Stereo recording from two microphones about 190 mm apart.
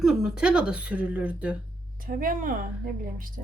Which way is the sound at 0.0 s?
5° right (ahead or behind).